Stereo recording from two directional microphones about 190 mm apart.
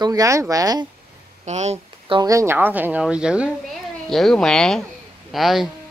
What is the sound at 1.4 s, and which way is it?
Speech, 35° right (ahead or behind).